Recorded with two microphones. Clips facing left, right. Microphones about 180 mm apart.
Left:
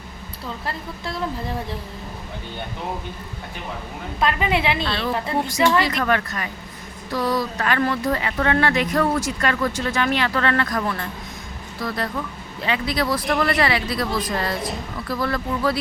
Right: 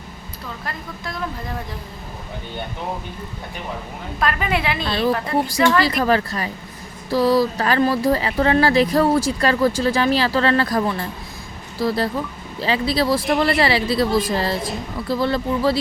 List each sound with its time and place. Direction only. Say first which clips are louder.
0.6 s a woman's voice: even; 30° left (ahead or behind)
4.2 s a woman's voice: left 1 dB; 20° left (ahead or behind)
4.9 s speech: right 4 dB; 25° right (ahead or behind)